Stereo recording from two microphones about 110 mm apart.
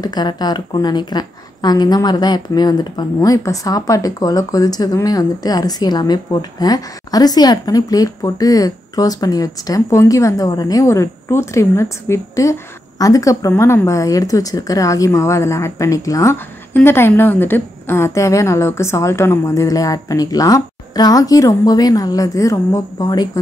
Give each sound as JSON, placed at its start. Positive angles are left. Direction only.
{"t": 0.0, "sound": "a woman's voice", "side_deg": 40}
{"t": 13.5, "sound": "a woman's voice", "side_deg": 20}